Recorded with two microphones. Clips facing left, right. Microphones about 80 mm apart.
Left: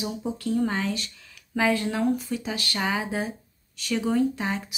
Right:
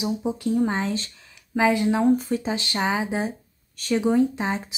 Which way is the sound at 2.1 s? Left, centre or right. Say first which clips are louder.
Right 6 dB; right.